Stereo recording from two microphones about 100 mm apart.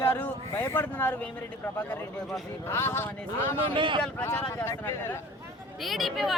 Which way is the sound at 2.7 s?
25° left (ahead or behind).